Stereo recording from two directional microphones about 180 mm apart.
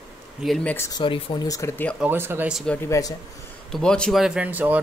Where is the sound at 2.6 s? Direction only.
10° left (ahead or behind).